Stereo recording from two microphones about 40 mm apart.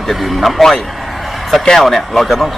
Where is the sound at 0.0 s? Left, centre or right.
Centre.